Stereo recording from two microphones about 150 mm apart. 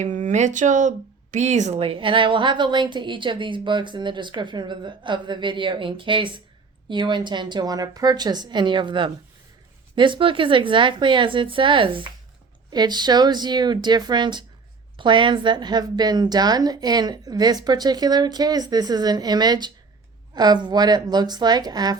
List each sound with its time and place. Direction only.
0.0 s a woman's voice: 55° right (ahead or behind); by 21.9 s 25° right (ahead or behind)